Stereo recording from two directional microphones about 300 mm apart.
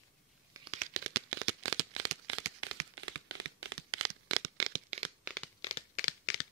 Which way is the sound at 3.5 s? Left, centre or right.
Right.